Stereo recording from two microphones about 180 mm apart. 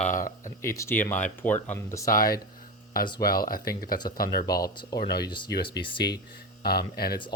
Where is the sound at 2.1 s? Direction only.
50° left (ahead or behind).